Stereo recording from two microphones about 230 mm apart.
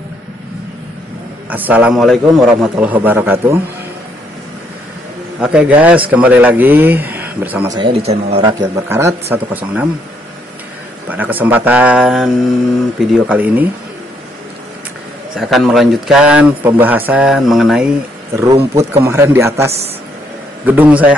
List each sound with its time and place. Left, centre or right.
1.5 s a man's voice: centre
5.4 s a man's voice: centre
8.0 s a man's voice: right; by 9.8 s centre
11.1 s a man's voice: centre
15.3 s speech: centre
18.4 s a man's voice: centre